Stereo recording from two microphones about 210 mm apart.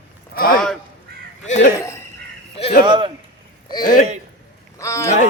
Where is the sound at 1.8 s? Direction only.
15° left (ahead or behind).